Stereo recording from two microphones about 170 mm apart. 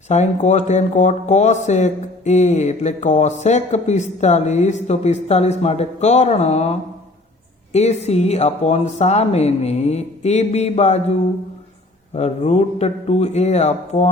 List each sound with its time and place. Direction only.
0.1 s speech: 45° left (ahead or behind)
12.1 s speech: 40° left (ahead or behind)